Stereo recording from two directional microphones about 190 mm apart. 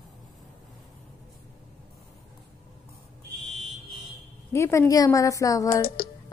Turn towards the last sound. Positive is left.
turn(degrees=15)  # may be behind; listen again after turning